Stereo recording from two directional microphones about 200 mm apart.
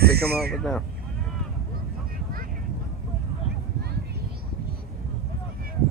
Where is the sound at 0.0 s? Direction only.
50° right (ahead or behind).